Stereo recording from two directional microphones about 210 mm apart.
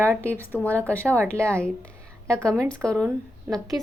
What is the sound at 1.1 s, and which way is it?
Speech, 10° right (ahead or behind).